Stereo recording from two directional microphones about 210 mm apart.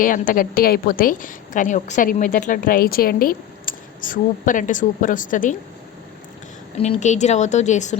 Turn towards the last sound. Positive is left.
turn(degrees=35)  # may be behind; listen again after turning